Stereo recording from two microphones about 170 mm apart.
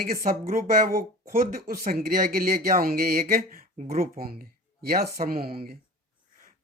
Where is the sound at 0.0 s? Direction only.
60° right (ahead or behind).